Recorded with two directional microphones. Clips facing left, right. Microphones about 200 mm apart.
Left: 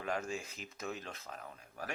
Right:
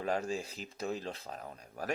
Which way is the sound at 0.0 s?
35° right (ahead or behind).